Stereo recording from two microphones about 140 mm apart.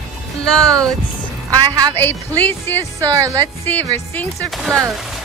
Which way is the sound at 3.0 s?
25° right (ahead or behind).